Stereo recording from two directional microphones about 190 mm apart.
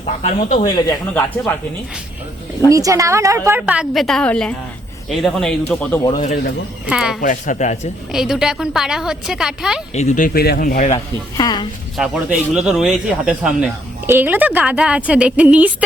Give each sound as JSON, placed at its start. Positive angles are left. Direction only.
{"t": 0.0, "sound": "speech", "side_deg": 35}
{"t": 2.6, "sound": "a woman's voice", "side_deg": -15}
{"t": 6.1, "sound": "speech", "side_deg": 40}
{"t": 6.8, "sound": "a woman's voice", "side_deg": -5}
{"t": 7.2, "sound": "speech", "side_deg": 45}
{"t": 8.1, "sound": "a woman's voice", "side_deg": -5}
{"t": 9.9, "sound": "speech", "side_deg": 40}
{"t": 11.3, "sound": "a woman's voice", "side_deg": 20}
{"t": 11.9, "sound": "a woman's voice", "side_deg": -5}